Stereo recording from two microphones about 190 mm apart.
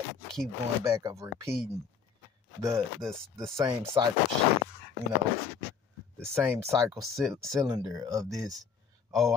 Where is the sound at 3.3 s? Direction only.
15° right (ahead or behind).